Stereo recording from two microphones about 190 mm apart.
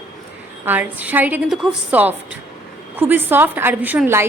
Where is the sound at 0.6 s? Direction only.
10° right (ahead or behind).